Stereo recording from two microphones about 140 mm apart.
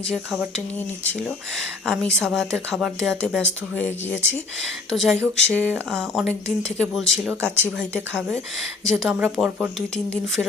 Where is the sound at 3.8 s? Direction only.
15° left (ahead or behind).